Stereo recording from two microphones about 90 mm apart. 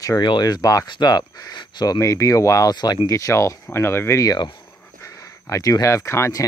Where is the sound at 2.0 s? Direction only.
40° left (ahead or behind).